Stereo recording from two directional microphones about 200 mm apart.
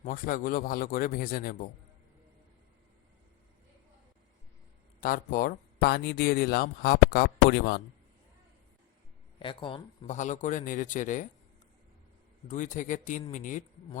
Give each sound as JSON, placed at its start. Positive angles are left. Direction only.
{"t": 0.0, "sound": "speech", "side_deg": 45}
{"t": 4.9, "sound": "speech", "side_deg": 40}
{"t": 9.4, "sound": "speech", "side_deg": 25}
{"t": 12.5, "sound": "speech", "side_deg": 40}